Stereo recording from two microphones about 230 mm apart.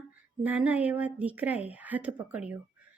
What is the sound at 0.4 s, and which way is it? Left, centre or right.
A woman's voice, centre.